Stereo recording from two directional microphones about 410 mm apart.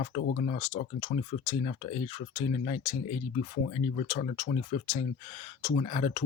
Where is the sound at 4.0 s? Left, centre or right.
Centre.